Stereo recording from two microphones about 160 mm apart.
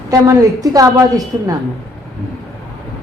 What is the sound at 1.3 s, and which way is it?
Speech, 20° right (ahead or behind).